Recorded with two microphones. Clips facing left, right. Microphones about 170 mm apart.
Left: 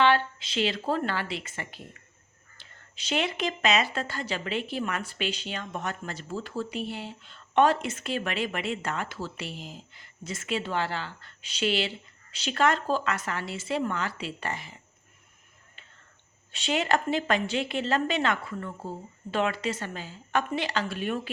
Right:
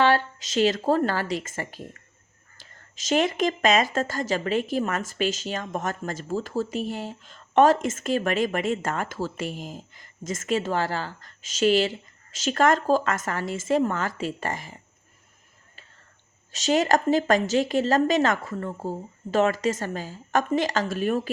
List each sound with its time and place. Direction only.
0.0 s a woman's voice: 40° right (ahead or behind)
16.5 s a woman's voice: 40° right (ahead or behind)